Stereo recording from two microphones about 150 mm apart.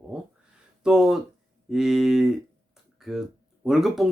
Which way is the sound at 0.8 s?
5° right (ahead or behind).